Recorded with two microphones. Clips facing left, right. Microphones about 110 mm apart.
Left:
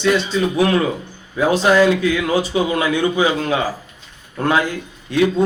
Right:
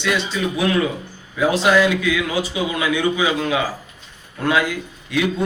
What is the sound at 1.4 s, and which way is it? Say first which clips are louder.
Speech: left 2 dB; 35° left (ahead or behind).